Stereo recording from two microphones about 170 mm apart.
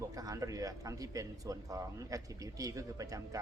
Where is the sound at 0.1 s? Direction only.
20° right (ahead or behind).